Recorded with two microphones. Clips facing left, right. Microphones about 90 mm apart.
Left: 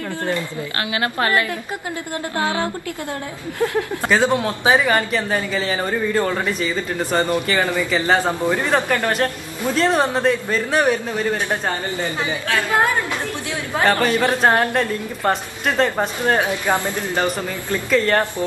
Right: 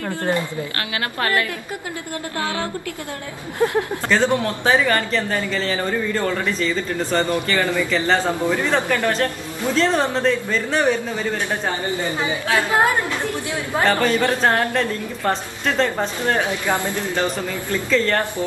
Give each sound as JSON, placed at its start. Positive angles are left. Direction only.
{"t": 3.5, "sound": "speech", "side_deg": -20}
{"t": 4.0, "sound": "a man's voice", "side_deg": 15}
{"t": 12.2, "sound": "a woman's voice", "side_deg": -15}
{"t": 14.0, "sound": "a man's voice", "side_deg": 15}